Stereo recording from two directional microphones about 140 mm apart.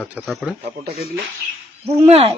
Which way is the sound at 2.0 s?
45° right (ahead or behind).